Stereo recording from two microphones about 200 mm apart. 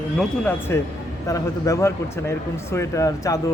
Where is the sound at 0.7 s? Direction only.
10° left (ahead or behind).